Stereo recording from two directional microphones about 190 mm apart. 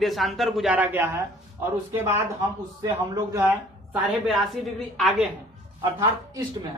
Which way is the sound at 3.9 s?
Centre (ahead or behind).